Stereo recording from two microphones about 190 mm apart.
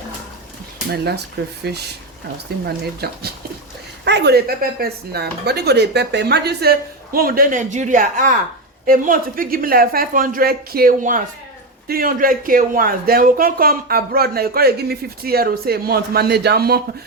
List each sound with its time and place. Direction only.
0.9 s a man's voice: 60° right (ahead or behind)